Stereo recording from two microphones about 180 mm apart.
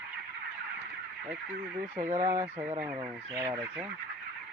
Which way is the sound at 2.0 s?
40° right (ahead or behind).